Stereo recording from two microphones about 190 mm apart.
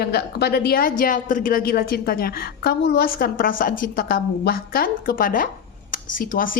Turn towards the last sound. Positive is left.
turn(degrees=45)  # may be behind; listen again after turning